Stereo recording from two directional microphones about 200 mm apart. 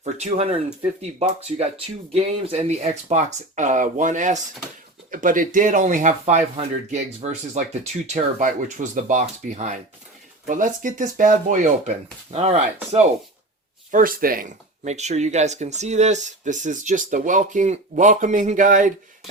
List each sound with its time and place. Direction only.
0.0 s speech: 35° right (ahead or behind)
13.9 s speech: 45° right (ahead or behind)